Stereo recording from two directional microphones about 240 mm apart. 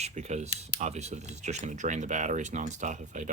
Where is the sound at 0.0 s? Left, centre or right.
Right.